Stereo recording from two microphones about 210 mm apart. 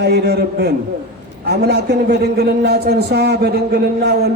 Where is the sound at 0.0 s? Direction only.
50° right (ahead or behind).